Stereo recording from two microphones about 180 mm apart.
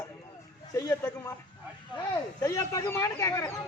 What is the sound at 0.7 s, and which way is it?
Speech, 20° left (ahead or behind).